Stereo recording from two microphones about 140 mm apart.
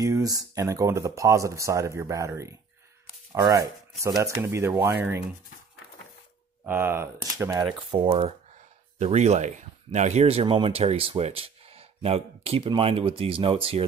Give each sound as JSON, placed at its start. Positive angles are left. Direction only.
{"t": 0.0, "sound": "speech", "side_deg": -25}
{"t": 6.6, "sound": "speech", "side_deg": -15}
{"t": 7.9, "sound": "speech", "side_deg": -35}
{"t": 8.9, "sound": "speech", "side_deg": -55}